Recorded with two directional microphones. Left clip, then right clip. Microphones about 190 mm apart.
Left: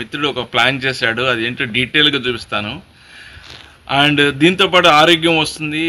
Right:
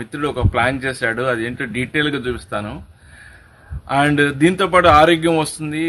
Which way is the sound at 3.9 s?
15° right (ahead or behind).